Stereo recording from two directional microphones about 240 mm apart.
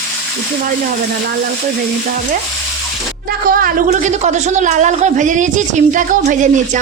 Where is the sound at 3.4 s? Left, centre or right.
Right.